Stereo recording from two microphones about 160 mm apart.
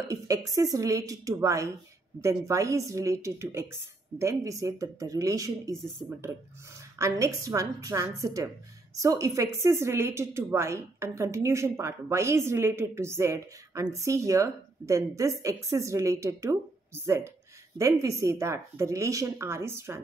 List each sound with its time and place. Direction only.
0.1 s a woman's voice: 20° right (ahead or behind)
7.0 s a woman's voice: 20° right (ahead or behind)